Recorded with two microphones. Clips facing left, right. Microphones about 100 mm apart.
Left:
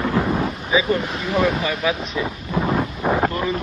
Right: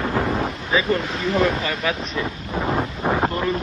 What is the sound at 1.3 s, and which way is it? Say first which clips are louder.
Speech: left 1 dB; 15° left (ahead or behind).